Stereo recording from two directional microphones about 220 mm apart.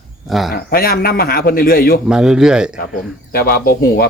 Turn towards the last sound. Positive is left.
turn(degrees=45)  # may be behind; listen again after turning